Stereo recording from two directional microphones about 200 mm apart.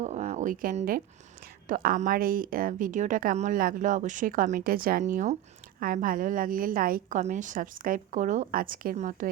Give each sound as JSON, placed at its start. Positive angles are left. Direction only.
{"t": 0.0, "sound": "speech", "side_deg": -35}